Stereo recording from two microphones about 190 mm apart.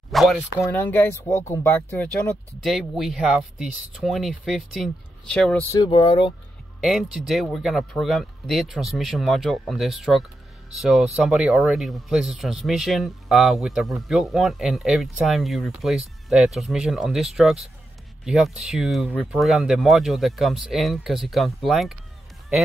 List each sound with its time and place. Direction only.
0.1 s speech: centre (ahead or behind)
0.7 s speech: 10° left (ahead or behind)
5.7 s speech: 25° left (ahead or behind)
6.8 s speech: centre (ahead or behind)